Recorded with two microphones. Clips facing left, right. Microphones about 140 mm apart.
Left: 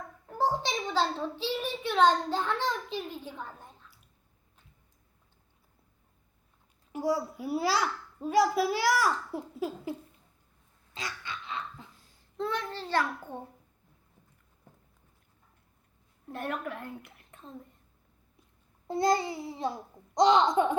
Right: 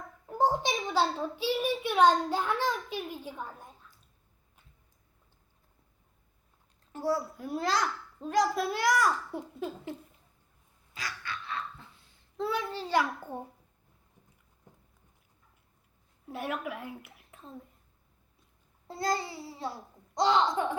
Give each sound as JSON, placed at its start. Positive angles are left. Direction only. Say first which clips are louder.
{"t": 0.3, "sound": "a child's voice", "louder": "right 2 dB", "side_deg": -15}
{"t": 6.9, "sound": "a child's voice", "louder": "left 1 dB", "side_deg": 10}
{"t": 10.9, "sound": "dog", "louder": "even", "side_deg": 20}
{"t": 12.4, "sound": "a child's voice", "louder": "right 1 dB", "side_deg": -10}
{"t": 16.3, "sound": "a woman's voice", "louder": "even", "side_deg": -5}
{"t": 18.9, "sound": "a child's voice", "louder": "left 5 dB", "side_deg": 20}